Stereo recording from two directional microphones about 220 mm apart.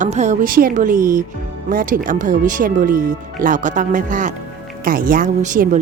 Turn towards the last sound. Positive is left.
turn(degrees=-35)  # may be behind; listen again after turning